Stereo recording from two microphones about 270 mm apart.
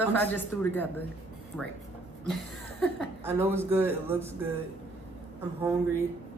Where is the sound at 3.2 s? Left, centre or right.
Centre.